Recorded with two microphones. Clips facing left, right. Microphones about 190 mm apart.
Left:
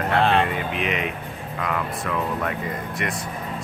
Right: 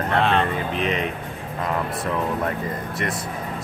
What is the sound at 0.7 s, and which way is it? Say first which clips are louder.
Speech: right 2 dB; 35° right (ahead or behind).